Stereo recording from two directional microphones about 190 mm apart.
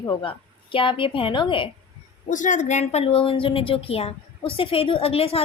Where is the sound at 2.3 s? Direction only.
40° left (ahead or behind).